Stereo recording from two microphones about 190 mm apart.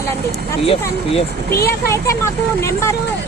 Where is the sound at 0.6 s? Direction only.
30° left (ahead or behind).